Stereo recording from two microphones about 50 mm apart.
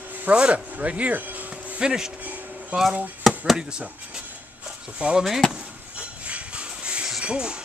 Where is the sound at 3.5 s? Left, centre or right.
Centre.